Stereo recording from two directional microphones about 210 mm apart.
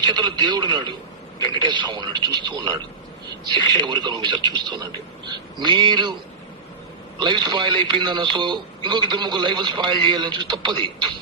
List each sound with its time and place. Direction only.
0.0 s speech: 20° right (ahead or behind)
7.2 s speech: 20° right (ahead or behind)